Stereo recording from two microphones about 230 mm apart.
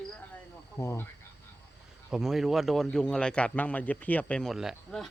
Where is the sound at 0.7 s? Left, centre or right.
Centre.